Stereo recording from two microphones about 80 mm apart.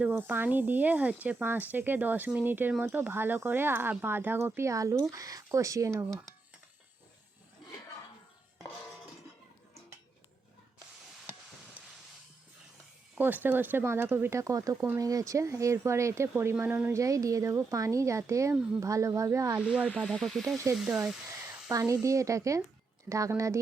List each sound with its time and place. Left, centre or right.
0.0 s speech: right
13.1 s speech: right
16.9 s speech: right
19.6 s speech: centre
20.1 s speech: centre
20.7 s speech: right